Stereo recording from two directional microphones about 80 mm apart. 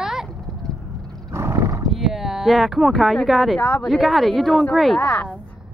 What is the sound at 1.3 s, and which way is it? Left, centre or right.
Neigh, right.